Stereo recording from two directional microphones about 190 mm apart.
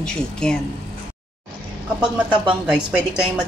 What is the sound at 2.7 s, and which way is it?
Speech, 5° right (ahead or behind).